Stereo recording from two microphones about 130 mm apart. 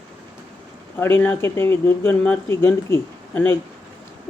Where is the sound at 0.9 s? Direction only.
15° left (ahead or behind).